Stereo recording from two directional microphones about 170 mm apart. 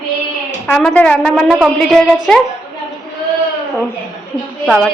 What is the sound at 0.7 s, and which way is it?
A woman's voice, 5° left (ahead or behind).